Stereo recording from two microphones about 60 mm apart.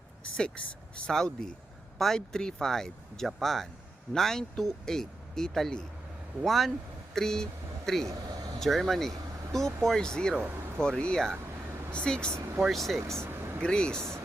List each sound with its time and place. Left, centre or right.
0.3 s speech: centre
12.5 s speech: centre
13.0 s vehicle: right
13.6 s speech: centre